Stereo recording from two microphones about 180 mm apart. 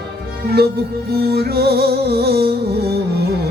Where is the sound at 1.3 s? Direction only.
60° right (ahead or behind).